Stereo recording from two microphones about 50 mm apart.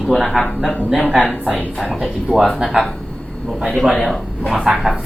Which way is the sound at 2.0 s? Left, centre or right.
Centre.